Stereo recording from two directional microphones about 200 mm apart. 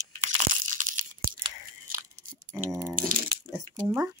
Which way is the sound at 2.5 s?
15° right (ahead or behind).